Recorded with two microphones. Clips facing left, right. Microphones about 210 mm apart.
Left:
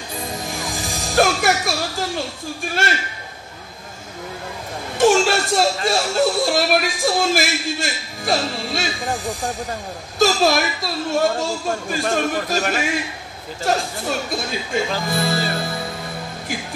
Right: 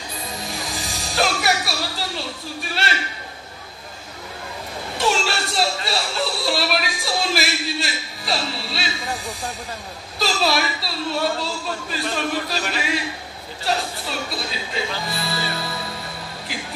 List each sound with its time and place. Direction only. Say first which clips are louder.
0.5 s music: left 3 dB; 50° left (ahead or behind)
4.9 s a sound: left 8 dB; 50° left (ahead or behind)
10.1 s a woman's voice: left 5 dB; 45° left (ahead or behind)